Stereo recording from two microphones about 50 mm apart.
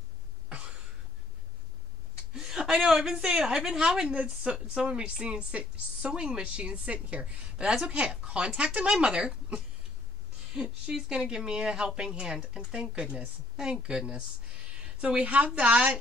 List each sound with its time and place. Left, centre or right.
0.5 s cough: right
2.3 s a woman's voice: centre; by 16.0 s right